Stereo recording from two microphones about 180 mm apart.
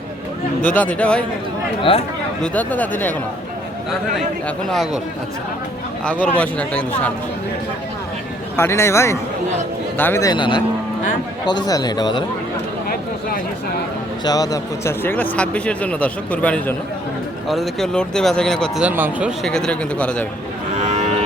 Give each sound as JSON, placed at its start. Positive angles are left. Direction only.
{"t": 0.8, "sound": "speech", "side_deg": 5}
{"t": 1.8, "sound": "speech", "side_deg": 30}
{"t": 2.4, "sound": "speech", "side_deg": 10}
{"t": 4.4, "sound": "speech", "side_deg": 0}
{"t": 6.1, "sound": "speech", "side_deg": 10}
{"t": 8.5, "sound": "speech", "side_deg": 15}
{"t": 14.3, "sound": "speech", "side_deg": 20}
{"t": 18.9, "sound": "speech", "side_deg": -10}
{"t": 19.4, "sound": "speech", "side_deg": 5}
{"t": 20.8, "sound": "cattle", "side_deg": -40}